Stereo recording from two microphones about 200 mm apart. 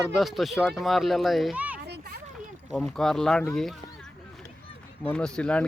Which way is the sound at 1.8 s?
55° right (ahead or behind).